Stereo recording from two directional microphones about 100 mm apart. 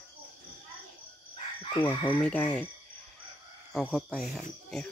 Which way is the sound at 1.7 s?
60° left (ahead or behind).